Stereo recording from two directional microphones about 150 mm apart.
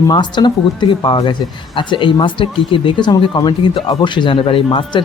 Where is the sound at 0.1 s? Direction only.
30° left (ahead or behind).